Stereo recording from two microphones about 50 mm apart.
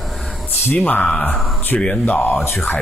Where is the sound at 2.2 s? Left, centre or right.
Left.